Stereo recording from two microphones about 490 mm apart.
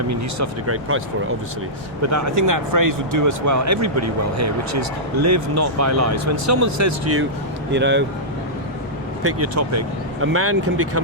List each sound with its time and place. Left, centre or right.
0.1 s speech: right
9.2 s speech: right